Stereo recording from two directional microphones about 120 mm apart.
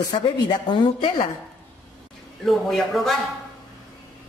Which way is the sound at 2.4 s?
Centre (ahead or behind).